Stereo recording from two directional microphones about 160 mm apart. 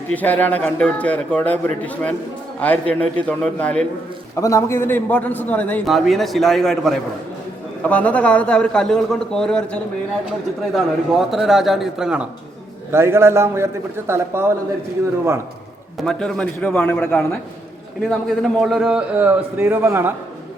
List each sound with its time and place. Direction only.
0.1 s a man's voice: 10° left (ahead or behind)
4.4 s a man's voice: 20° left (ahead or behind)
5.8 s a man's voice: centre (ahead or behind)
10.8 s a man's voice: centre (ahead or behind)
12.9 s a man's voice: 15° right (ahead or behind)
16.0 s a man's voice: 5° left (ahead or behind); by 20.1 s 15° right (ahead or behind)